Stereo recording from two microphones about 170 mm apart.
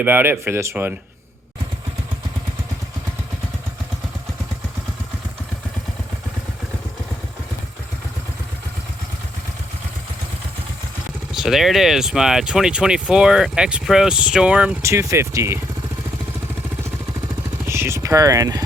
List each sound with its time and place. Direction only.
0.0 s speech: 10° right (ahead or behind)
11.3 s speech: centre (ahead or behind)
17.7 s speech: 15° right (ahead or behind)